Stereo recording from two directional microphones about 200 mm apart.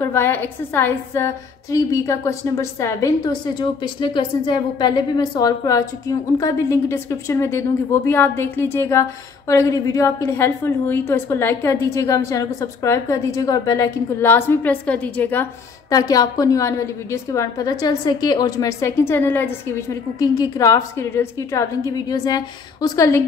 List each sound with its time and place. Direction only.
0.0 s a woman's voice: 10° left (ahead or behind)